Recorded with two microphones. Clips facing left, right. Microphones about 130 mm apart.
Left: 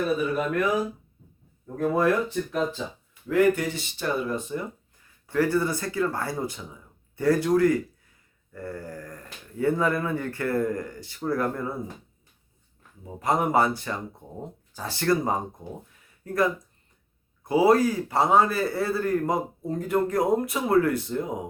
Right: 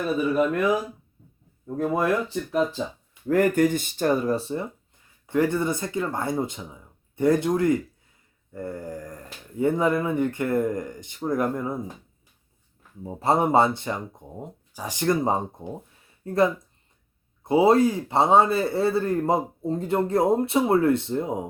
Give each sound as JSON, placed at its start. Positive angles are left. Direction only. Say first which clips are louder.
{"t": 1.6, "sound": "speech", "louder": "left 1 dB", "side_deg": -15}
{"t": 3.2, "sound": "speech", "louder": "right 2 dB", "side_deg": -45}
{"t": 5.2, "sound": "speech", "louder": "right 1 dB", "side_deg": -20}
{"t": 13.1, "sound": "speech", "louder": "right 3 dB", "side_deg": -30}